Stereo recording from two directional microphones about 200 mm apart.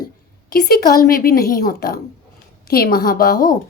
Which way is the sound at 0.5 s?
50° left (ahead or behind).